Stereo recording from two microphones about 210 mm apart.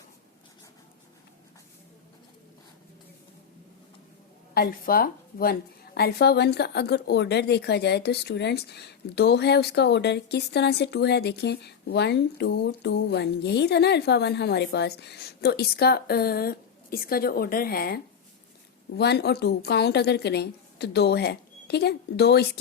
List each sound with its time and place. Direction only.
4.5 s a woman's voice: 45° left (ahead or behind)